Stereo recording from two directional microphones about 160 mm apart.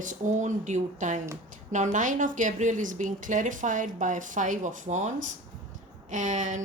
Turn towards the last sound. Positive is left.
turn(degrees=-50)  # may be behind; listen again after turning